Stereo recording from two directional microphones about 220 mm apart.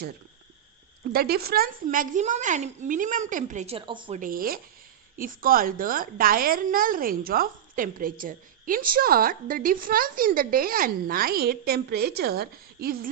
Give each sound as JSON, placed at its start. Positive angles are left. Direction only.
{"t": 1.1, "sound": "a woman's voice", "side_deg": -45}
{"t": 4.2, "sound": "a woman's voice", "side_deg": -40}